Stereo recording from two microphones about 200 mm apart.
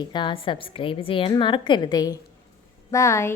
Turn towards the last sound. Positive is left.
turn(degrees=15)  # may be behind; listen again after turning